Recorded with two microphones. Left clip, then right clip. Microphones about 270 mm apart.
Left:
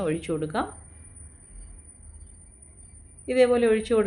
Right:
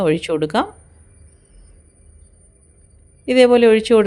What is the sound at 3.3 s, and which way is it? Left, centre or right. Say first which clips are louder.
Speech: right 9 dB; right.